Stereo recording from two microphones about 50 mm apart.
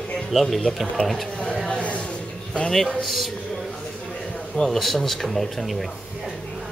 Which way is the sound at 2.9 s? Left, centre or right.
Centre.